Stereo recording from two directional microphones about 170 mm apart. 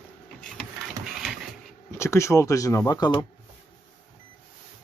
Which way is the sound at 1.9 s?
15° left (ahead or behind).